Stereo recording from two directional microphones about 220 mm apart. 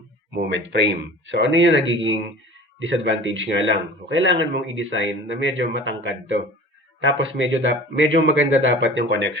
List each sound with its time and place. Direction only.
0.3 s speech: 50° right (ahead or behind)